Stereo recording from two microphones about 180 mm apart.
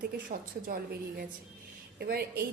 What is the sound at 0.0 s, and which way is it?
A woman's voice, 50° right (ahead or behind).